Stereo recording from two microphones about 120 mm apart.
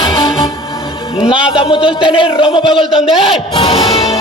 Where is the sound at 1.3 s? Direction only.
50° left (ahead or behind).